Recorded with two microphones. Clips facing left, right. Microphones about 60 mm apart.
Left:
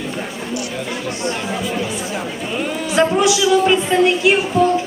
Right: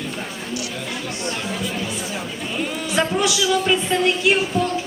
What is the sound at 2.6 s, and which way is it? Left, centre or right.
A man's voice, centre.